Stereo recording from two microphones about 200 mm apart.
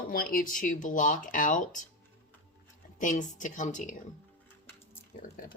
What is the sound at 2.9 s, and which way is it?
Speech, 40° left (ahead or behind).